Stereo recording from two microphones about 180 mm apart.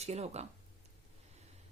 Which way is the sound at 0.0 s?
35° right (ahead or behind).